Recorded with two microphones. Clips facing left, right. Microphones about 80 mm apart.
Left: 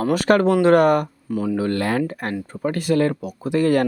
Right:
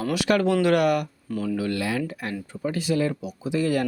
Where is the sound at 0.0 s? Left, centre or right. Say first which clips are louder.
Left 5 dB; left.